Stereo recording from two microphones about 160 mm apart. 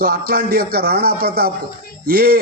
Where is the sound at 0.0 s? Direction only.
70° right (ahead or behind).